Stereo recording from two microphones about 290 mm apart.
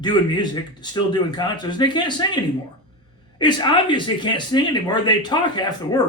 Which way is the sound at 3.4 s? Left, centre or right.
Centre.